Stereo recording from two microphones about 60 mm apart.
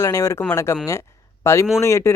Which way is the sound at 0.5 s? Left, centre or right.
Left.